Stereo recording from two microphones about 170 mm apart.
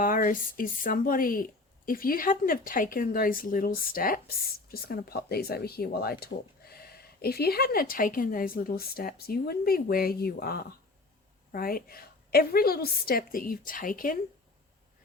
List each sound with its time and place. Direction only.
0.0 s speech: 55° left (ahead or behind)